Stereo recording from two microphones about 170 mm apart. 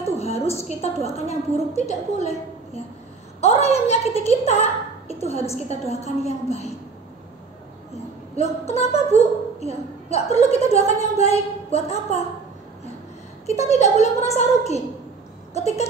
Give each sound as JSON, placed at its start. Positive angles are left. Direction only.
{"t": 0.2, "sound": "a sound", "side_deg": 35}
{"t": 0.6, "sound": "a woman's voice", "side_deg": 35}
{"t": 8.4, "sound": "a woman's voice", "side_deg": 40}
{"t": 13.5, "sound": "a woman's voice", "side_deg": 40}